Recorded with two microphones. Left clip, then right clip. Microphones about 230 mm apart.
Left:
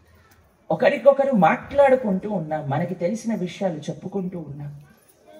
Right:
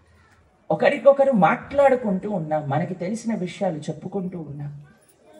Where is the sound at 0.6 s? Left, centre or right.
Right.